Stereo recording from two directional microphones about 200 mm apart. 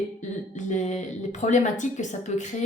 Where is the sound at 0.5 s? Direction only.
40° left (ahead or behind).